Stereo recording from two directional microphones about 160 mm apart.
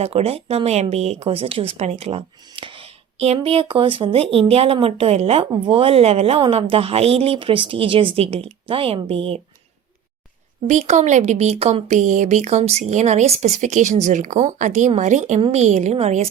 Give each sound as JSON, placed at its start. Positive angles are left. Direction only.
{"t": 0.0, "sound": "speech", "side_deg": -40}
{"t": 10.7, "sound": "speech", "side_deg": -50}